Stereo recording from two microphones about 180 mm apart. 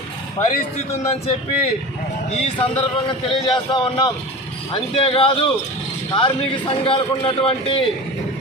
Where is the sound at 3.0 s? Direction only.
25° left (ahead or behind).